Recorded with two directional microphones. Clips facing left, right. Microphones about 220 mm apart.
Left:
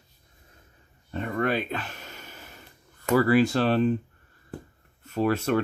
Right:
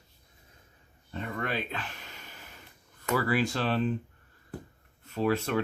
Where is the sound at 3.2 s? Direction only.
40° left (ahead or behind).